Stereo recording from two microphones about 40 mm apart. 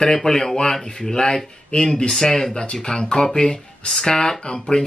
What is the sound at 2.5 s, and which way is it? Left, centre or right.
Speech, left.